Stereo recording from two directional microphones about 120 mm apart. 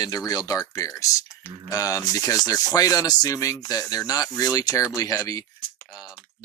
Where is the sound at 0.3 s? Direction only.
30° left (ahead or behind).